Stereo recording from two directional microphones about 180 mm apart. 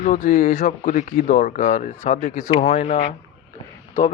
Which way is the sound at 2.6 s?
35° left (ahead or behind).